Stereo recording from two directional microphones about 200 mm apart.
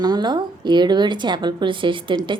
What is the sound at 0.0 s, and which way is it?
A woman's voice, 20° right (ahead or behind).